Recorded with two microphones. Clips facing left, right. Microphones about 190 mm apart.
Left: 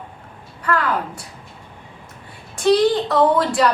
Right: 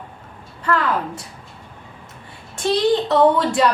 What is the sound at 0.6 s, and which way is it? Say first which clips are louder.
Speech: right 1 dB; 25° right (ahead or behind).